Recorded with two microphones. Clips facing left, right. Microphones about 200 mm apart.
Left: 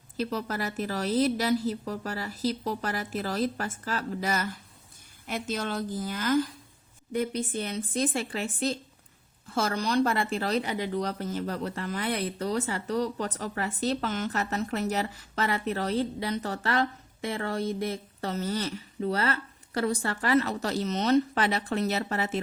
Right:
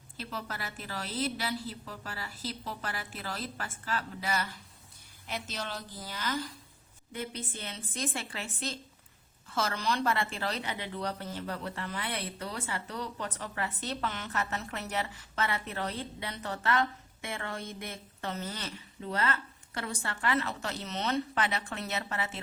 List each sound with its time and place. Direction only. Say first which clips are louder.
0.2 s a woman's voice: left 9 dB; 40° left (ahead or behind)
9.5 s a woman's voice: left 4 dB; 40° left (ahead or behind)